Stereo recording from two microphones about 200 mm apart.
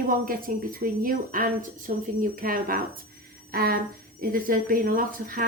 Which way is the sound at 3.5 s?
50° right (ahead or behind).